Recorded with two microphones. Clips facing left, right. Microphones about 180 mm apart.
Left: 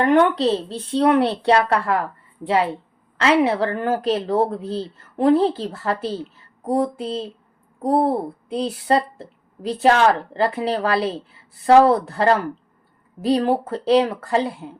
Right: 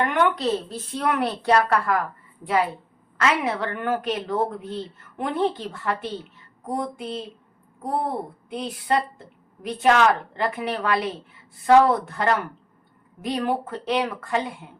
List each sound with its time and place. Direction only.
0.0 s a woman's voice: 35° left (ahead or behind)
3.2 s a woman's voice: 30° left (ahead or behind)